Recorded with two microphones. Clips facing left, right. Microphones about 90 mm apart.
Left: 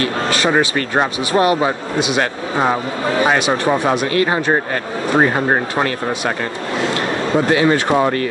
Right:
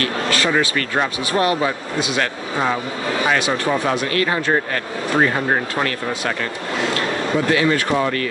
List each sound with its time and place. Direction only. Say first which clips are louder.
0.0 s vehicle: left 3 dB; 20° left (ahead or behind)
0.6 s speech: left 3 dB; 25° left (ahead or behind)
6.9 s a sound: left 3 dB; 30° left (ahead or behind)
7.7 s speech: left 4 dB; 25° left (ahead or behind)